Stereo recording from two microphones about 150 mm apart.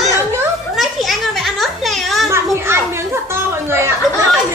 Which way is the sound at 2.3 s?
15° right (ahead or behind).